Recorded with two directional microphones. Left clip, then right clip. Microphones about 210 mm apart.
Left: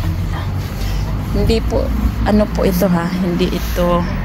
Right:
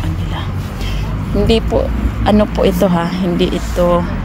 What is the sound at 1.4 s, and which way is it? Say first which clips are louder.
Speech: right 4 dB; 15° right (ahead or behind).